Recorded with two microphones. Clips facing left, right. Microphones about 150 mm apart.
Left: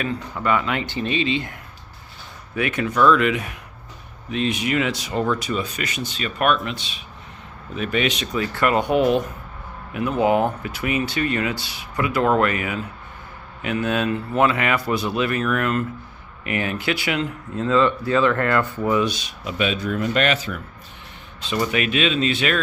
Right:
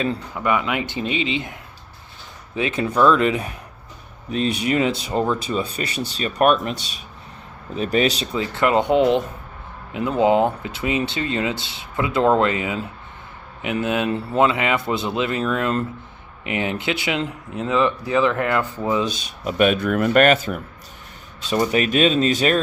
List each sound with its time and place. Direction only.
0.3 s speech: 15° right (ahead or behind)
2.6 s speech: 25° right (ahead or behind)
7.8 s speech: 35° right (ahead or behind); by 19.0 s 20° right (ahead or behind)
19.5 s speech: 50° right (ahead or behind)
21.5 s speech: 35° right (ahead or behind)